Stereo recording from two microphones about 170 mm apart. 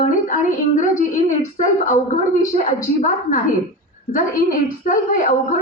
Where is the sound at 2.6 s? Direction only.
50° left (ahead or behind).